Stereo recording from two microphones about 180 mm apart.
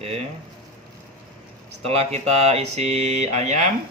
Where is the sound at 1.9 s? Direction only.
35° right (ahead or behind).